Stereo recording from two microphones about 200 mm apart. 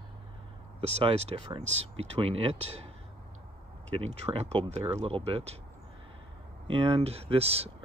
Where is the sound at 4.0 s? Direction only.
30° right (ahead or behind).